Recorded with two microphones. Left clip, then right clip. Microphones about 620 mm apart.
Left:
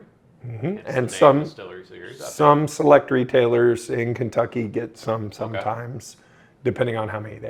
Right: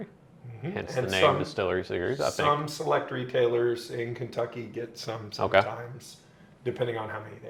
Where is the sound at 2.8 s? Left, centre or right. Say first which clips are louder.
Left 13 dB; left.